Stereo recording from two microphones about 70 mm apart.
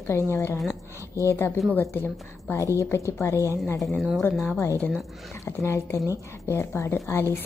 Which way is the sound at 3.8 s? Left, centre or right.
Centre.